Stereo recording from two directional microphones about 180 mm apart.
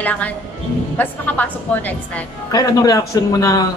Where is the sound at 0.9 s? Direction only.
10° left (ahead or behind).